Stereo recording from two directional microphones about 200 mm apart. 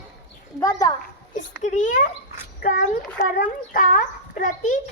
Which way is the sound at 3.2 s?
45° left (ahead or behind).